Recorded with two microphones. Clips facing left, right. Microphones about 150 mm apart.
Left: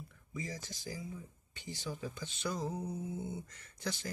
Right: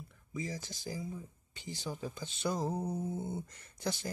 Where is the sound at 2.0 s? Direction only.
15° right (ahead or behind).